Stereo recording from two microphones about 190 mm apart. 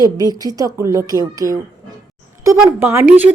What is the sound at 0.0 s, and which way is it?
A woman's voice, 20° right (ahead or behind).